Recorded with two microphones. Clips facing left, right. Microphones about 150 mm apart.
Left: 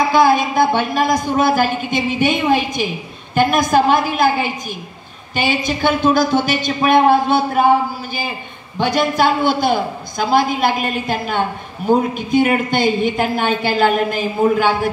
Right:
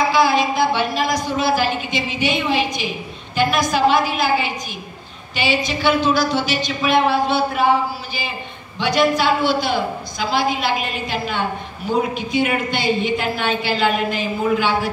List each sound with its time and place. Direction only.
0.1 s speech: 50° left (ahead or behind)